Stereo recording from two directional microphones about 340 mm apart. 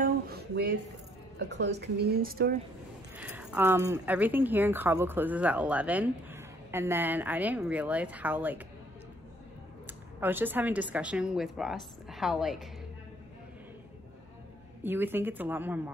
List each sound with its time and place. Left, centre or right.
0.0 s a sound: right
1.5 s speech: right
3.2 s speech: centre
9.8 s speech: centre
14.8 s speech: centre